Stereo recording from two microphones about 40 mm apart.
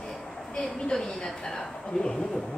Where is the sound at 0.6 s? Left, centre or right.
Centre.